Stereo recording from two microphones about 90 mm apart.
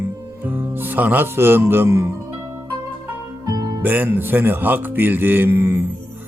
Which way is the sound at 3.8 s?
20° right (ahead or behind).